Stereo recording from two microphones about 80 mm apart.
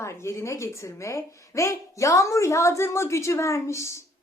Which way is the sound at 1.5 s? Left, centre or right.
Left.